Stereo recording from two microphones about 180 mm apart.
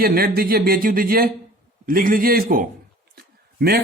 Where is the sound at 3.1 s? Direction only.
60° right (ahead or behind).